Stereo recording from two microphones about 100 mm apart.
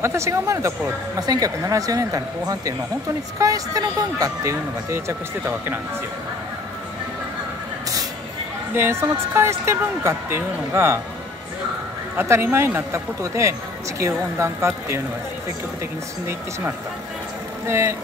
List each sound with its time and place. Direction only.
0.0 s speech: 30° right (ahead or behind)
8.7 s speech: 25° right (ahead or behind)
12.2 s speech: 25° right (ahead or behind)
17.6 s speech: 25° right (ahead or behind)